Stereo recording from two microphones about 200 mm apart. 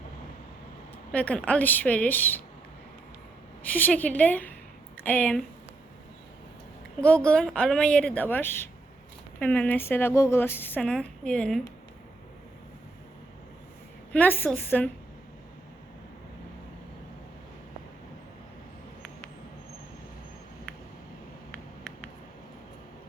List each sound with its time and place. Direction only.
1.1 s speech: 5° left (ahead or behind)
3.7 s speech: 10° left (ahead or behind)
7.0 s a woman's voice: 5° left (ahead or behind)
14.1 s speech: 10° left (ahead or behind)